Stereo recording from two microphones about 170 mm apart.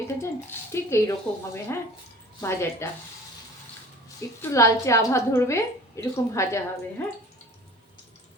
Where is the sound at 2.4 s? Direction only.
15° left (ahead or behind).